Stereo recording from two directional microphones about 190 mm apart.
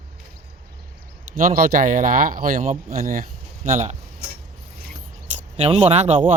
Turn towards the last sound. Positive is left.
turn(degrees=-40)  # may be behind; listen again after turning